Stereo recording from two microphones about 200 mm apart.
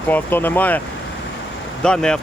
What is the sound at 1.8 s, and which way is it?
Speech, 5° left (ahead or behind).